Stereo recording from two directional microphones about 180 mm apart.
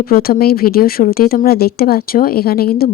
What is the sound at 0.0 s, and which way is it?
Speech, 55° left (ahead or behind).